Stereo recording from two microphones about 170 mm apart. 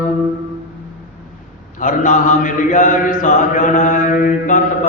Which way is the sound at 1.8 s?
50° left (ahead or behind).